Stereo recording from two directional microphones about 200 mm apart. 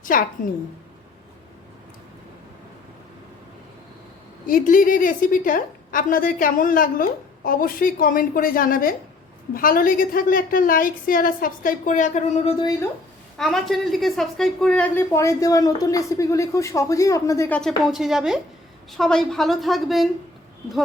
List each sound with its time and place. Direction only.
0.0 s a woman's voice: 45° left (ahead or behind)
4.4 s a woman's voice: 45° left (ahead or behind)
13.3 s a woman's voice: centre (ahead or behind)
17.6 s a woman's voice: centre (ahead or behind)